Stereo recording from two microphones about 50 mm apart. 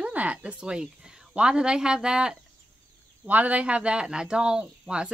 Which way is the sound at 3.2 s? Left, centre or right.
Right.